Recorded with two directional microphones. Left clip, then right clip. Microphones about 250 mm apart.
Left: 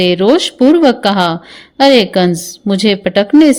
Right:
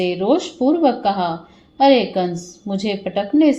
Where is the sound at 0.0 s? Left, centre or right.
Left.